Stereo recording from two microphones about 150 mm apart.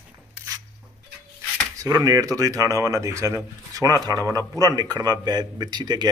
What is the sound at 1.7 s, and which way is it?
A man's voice, 25° right (ahead or behind).